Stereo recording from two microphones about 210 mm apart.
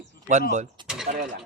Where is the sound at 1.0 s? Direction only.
35° right (ahead or behind).